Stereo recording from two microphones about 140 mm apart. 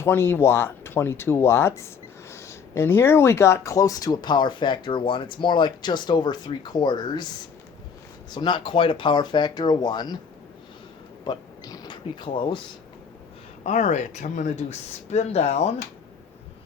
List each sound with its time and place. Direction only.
0.0 s speech: 15° left (ahead or behind)
8.3 s speech: 35° left (ahead or behind)
11.3 s mechanisms: 30° left (ahead or behind)
13.7 s speech: 55° left (ahead or behind)